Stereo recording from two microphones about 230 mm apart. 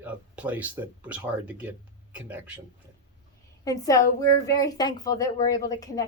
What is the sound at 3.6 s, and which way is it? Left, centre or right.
A woman's voice, centre.